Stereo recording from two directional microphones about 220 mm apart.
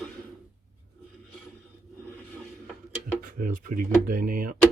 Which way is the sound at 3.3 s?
40° right (ahead or behind).